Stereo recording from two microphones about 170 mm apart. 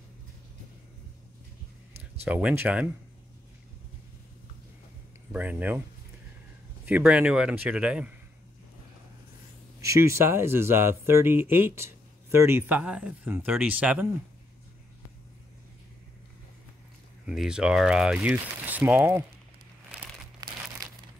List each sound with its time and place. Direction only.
2.2 s speech: 10° right (ahead or behind)
5.3 s speech: 10° right (ahead or behind)
6.9 s speech: 5° right (ahead or behind)
9.8 s speech: 15° right (ahead or behind)
17.3 s speech: 5° right (ahead or behind)
20.3 s crumpling: 20° right (ahead or behind)